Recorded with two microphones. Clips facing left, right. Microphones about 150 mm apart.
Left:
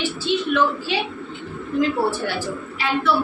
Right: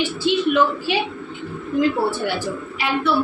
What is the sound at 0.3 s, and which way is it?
Speech, 15° right (ahead or behind).